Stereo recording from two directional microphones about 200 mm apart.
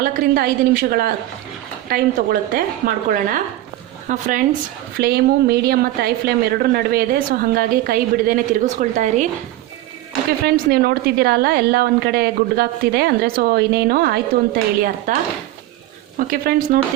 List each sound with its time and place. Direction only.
0.0 s a woman's voice: 45° right (ahead or behind)
10.4 s a woman's voice: 50° right (ahead or behind)
16.1 s a woman's voice: 45° right (ahead or behind)